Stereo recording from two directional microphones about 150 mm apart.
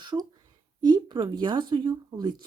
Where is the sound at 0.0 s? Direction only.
30° right (ahead or behind).